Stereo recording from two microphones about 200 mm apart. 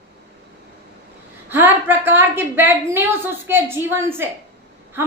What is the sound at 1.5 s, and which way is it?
A woman's voice, 10° right (ahead or behind).